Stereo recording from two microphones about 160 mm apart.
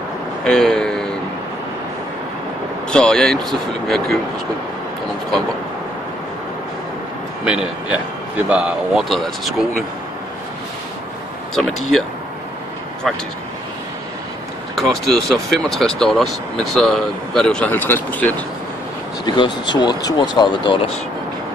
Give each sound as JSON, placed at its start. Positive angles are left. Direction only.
{"t": 0.4, "sound": "speech", "side_deg": 5}
{"t": 2.9, "sound": "speech", "side_deg": 5}
{"t": 7.4, "sound": "a man's voice", "side_deg": -5}
{"t": 11.5, "sound": "speech", "side_deg": 0}
{"t": 13.0, "sound": "speech", "side_deg": 5}
{"t": 14.8, "sound": "speech", "side_deg": 0}
{"t": 19.2, "sound": "speech", "side_deg": 30}